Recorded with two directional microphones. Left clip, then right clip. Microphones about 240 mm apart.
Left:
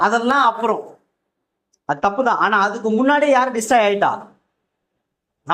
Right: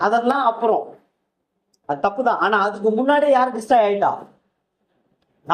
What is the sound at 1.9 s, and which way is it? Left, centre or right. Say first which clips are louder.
A man's voice: left 2 dB; left.